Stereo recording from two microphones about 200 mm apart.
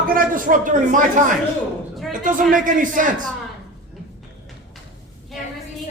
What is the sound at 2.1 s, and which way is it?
Speech, 40° right (ahead or behind).